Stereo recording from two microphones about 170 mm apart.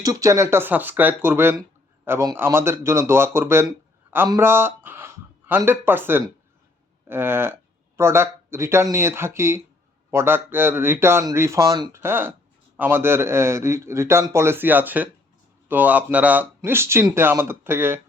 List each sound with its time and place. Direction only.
0.0 s a man's voice: 20° right (ahead or behind)